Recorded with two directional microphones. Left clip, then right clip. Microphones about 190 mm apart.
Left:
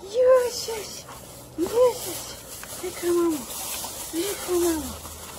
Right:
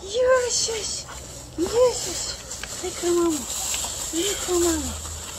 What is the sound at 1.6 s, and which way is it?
Speech, 10° left (ahead or behind).